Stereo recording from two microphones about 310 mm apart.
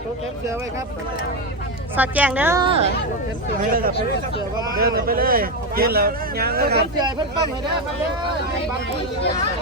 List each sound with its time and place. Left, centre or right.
2.0 s a woman's voice: centre
3.7 s speech: right